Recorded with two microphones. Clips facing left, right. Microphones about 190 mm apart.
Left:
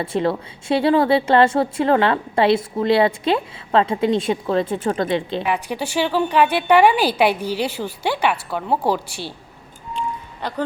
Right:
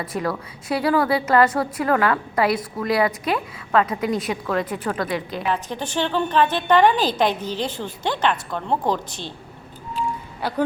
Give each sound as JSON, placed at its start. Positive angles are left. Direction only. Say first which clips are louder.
{"t": 0.0, "sound": "a woman's voice", "louder": "left 5 dB", "side_deg": 25}
{"t": 5.6, "sound": "a woman's voice", "louder": "left 3 dB", "side_deg": 10}
{"t": 10.4, "sound": "a man's voice", "louder": "right 1 dB", "side_deg": -10}